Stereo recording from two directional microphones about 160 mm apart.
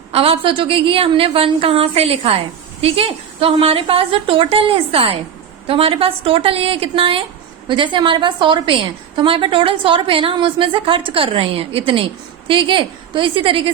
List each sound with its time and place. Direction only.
0.1 s a woman's voice: 35° right (ahead or behind)